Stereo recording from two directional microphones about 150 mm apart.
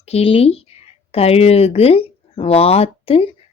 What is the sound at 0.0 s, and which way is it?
Speech, 40° left (ahead or behind).